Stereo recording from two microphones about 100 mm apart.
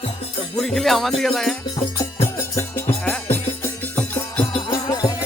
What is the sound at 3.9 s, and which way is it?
Music, 15° left (ahead or behind).